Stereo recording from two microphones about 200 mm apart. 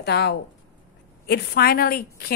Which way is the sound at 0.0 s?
55° left (ahead or behind).